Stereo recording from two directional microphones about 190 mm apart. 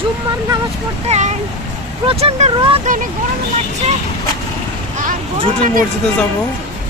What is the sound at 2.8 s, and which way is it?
Speech, 45° right (ahead or behind).